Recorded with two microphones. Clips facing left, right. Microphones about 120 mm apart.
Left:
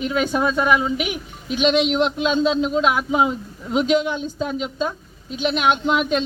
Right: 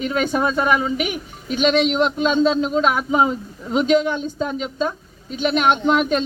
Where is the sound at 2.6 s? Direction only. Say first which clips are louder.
Even; centre (ahead or behind).